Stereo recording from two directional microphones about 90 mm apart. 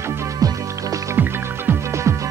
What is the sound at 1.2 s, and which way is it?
Music, 25° right (ahead or behind).